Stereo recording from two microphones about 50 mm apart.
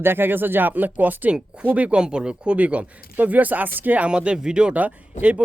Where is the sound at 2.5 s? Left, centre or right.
Right.